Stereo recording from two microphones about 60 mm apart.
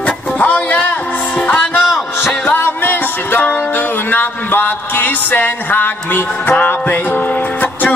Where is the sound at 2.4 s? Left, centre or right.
Left.